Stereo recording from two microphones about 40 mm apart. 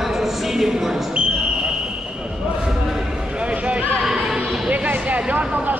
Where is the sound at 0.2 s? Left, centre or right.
Centre.